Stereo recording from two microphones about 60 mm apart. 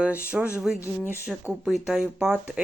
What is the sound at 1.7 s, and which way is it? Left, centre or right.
Speech, centre.